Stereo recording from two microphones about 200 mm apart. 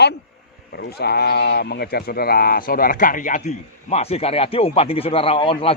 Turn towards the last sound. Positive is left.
turn(degrees=25)  # may be behind; listen again after turning